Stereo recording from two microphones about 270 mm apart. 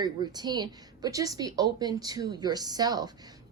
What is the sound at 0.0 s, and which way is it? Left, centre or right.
A woman's voice, centre.